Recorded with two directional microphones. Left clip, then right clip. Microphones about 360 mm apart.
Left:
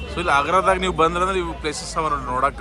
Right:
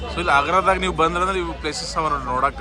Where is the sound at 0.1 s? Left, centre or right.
Centre.